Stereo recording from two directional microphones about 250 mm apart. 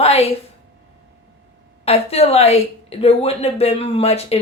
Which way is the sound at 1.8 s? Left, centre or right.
Left.